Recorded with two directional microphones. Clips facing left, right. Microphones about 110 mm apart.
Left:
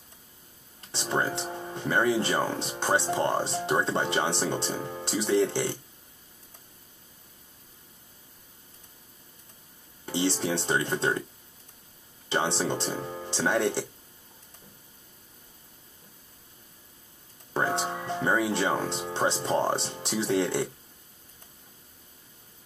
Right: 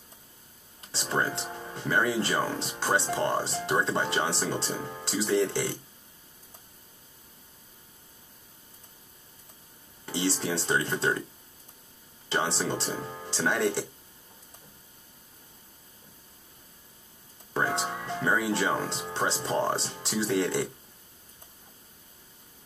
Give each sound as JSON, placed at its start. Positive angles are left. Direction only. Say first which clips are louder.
{"t": 0.9, "sound": "speech", "louder": "left 1 dB", "side_deg": 25}
{"t": 10.1, "sound": "speech", "louder": "left 2 dB", "side_deg": 20}
{"t": 12.3, "sound": "speech", "louder": "left 1 dB", "side_deg": 20}
{"t": 17.6, "sound": "speech", "louder": "left 1 dB", "side_deg": 25}